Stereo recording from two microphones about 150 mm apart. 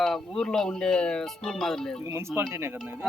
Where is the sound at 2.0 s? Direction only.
15° right (ahead or behind).